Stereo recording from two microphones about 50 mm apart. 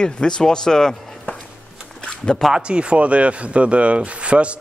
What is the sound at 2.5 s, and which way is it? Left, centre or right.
Speech, right.